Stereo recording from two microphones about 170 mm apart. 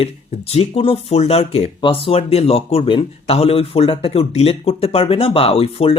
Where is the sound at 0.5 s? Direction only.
35° left (ahead or behind).